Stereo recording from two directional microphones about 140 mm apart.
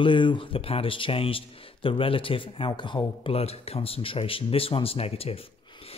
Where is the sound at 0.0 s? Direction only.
35° left (ahead or behind).